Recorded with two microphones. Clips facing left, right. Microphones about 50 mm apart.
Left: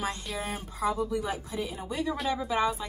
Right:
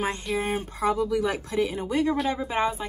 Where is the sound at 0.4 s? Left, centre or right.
Right.